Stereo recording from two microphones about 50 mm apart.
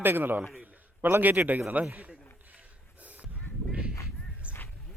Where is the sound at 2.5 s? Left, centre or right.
Right.